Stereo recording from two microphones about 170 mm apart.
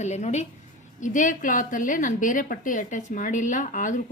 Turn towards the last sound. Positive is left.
turn(degrees=50)  # may be behind; listen again after turning